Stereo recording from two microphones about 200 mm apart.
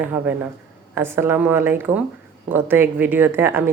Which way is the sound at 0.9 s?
10° right (ahead or behind).